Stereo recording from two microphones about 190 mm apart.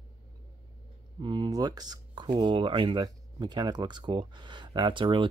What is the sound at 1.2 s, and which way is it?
Speech, 20° right (ahead or behind).